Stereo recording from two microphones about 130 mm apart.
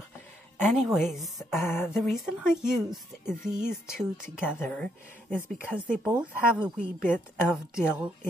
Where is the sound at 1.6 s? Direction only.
20° left (ahead or behind).